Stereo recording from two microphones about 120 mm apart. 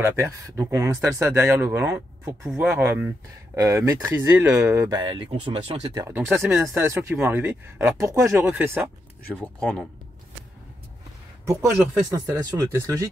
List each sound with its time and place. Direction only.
0.0 s speech: 25° right (ahead or behind)
4.9 s speech: 40° right (ahead or behind)
6.0 s speech: 15° right (ahead or behind)
9.4 s speech: 10° left (ahead or behind)
11.7 s speech: 20° right (ahead or behind)